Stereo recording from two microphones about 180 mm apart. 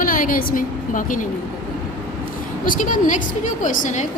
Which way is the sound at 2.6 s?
45° left (ahead or behind).